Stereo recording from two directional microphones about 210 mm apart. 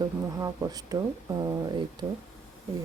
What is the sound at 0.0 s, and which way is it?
Speech, 15° right (ahead or behind).